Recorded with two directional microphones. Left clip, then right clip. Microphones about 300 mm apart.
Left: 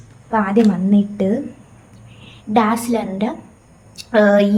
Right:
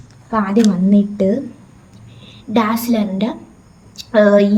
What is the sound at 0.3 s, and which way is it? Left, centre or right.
A woman's voice, centre.